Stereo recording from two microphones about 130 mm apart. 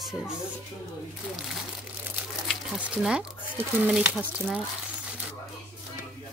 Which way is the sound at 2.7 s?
5° right (ahead or behind).